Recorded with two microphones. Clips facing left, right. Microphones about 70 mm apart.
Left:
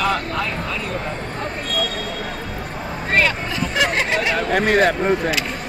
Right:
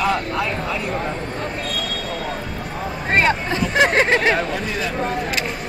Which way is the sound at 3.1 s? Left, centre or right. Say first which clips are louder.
Right 2 dB; right.